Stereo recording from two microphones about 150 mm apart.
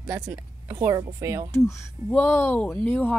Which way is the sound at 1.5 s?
20° left (ahead or behind).